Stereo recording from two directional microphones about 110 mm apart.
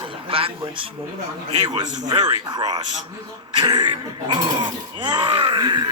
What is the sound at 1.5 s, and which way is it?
A man's voice, 45° right (ahead or behind).